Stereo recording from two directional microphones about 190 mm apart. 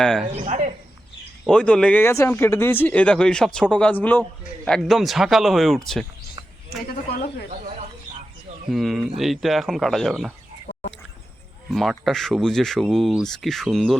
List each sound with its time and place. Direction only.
0.0 s speech: 5° left (ahead or behind)
0.3 s speech: 35° right (ahead or behind)
1.5 s speech: 5° left (ahead or behind)
8.7 s speech: centre (ahead or behind)
11.7 s speech: centre (ahead or behind)